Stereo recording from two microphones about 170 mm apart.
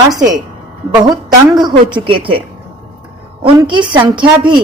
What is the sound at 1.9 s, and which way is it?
Speech, 30° right (ahead or behind).